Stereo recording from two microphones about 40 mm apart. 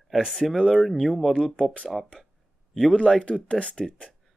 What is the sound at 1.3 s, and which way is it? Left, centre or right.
Speech, left.